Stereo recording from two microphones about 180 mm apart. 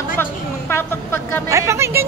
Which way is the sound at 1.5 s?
15° right (ahead or behind).